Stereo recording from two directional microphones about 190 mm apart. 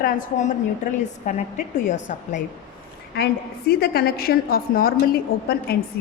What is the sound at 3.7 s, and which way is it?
A woman's voice, 55° left (ahead or behind).